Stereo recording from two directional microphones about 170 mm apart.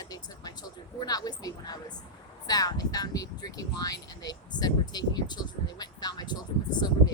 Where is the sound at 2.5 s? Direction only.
20° left (ahead or behind).